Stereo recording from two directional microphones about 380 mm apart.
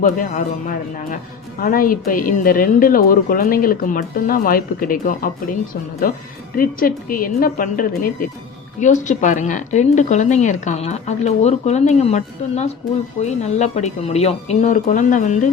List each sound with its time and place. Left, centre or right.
0.0 s speech: left
6.6 s speech: left